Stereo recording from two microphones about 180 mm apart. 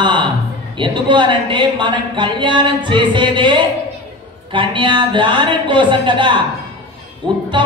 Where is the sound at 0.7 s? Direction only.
25° right (ahead or behind).